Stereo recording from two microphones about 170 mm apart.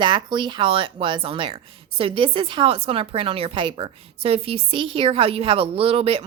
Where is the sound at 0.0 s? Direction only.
30° right (ahead or behind).